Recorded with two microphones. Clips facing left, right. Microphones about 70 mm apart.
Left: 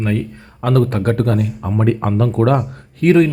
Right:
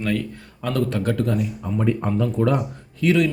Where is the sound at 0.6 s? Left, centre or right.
Left.